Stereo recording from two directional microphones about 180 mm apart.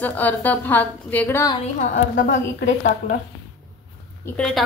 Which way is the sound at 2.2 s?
50° left (ahead or behind).